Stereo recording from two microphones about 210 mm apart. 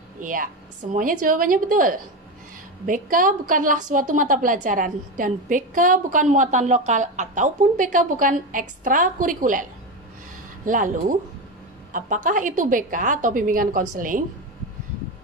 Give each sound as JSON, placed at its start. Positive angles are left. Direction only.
{"t": 0.2, "sound": "a woman's voice", "side_deg": -40}